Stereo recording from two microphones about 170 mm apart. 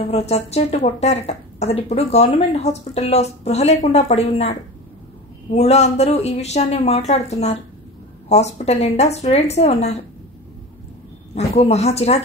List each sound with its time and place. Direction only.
0.0 s a woman's voice: 40° left (ahead or behind)
5.5 s a woman's voice: 40° left (ahead or behind)
11.3 s a woman's voice: 40° left (ahead or behind)